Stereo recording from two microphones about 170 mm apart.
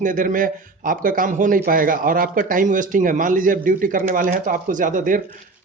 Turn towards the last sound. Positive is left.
turn(degrees=-50)  # may be behind; listen again after turning